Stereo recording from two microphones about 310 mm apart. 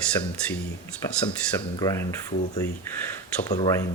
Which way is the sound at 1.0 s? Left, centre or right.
Centre.